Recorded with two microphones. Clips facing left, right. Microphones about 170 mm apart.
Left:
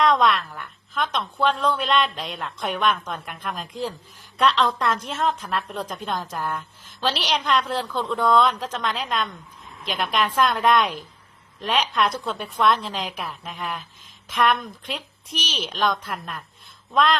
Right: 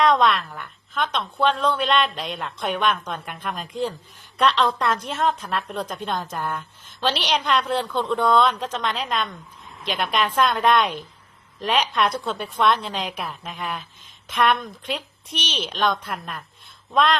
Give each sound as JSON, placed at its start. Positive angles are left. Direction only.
{"t": 0.0, "sound": "a woman's voice", "side_deg": 0}